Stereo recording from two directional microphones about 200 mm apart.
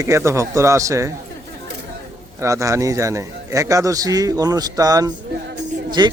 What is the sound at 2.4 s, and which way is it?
A man's voice, 15° right (ahead or behind).